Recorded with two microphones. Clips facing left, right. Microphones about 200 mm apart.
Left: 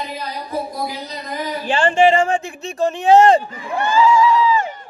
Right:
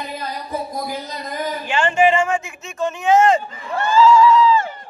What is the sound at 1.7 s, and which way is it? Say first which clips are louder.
Speech: left 2 dB; 35° left (ahead or behind).